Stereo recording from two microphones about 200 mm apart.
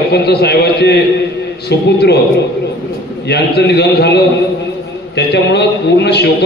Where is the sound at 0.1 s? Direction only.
55° left (ahead or behind).